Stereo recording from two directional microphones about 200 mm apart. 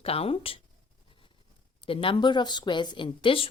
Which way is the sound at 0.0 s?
30° left (ahead or behind).